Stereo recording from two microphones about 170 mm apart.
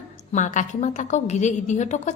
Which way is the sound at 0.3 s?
45° left (ahead or behind).